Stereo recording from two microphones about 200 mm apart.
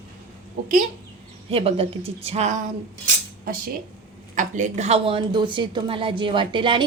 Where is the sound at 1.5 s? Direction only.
30° right (ahead or behind).